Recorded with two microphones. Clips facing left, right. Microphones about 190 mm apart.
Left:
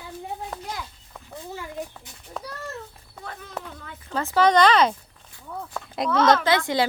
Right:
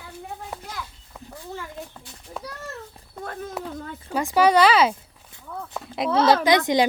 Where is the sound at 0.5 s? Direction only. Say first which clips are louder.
Even; 10° right (ahead or behind).